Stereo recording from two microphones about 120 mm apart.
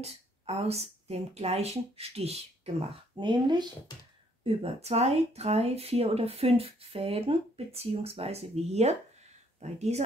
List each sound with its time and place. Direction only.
0.0 s speech: 60° right (ahead or behind)
3.2 s speech: 40° right (ahead or behind)
4.5 s speech: 55° right (ahead or behind)